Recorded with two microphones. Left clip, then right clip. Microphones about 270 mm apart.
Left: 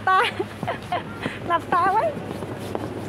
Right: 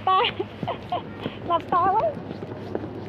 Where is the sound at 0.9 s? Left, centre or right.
Left.